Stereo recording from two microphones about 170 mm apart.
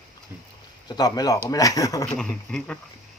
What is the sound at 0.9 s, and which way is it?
Speech, 25° left (ahead or behind).